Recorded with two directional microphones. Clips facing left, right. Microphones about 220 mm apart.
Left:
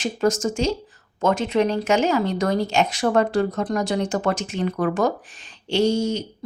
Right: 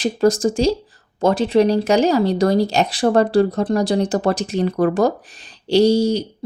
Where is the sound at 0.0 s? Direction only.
35° right (ahead or behind).